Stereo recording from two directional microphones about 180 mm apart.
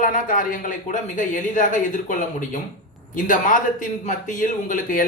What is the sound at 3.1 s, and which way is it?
A man's voice, 50° left (ahead or behind).